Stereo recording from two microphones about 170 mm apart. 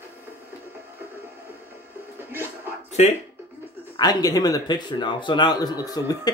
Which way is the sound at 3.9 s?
25° left (ahead or behind).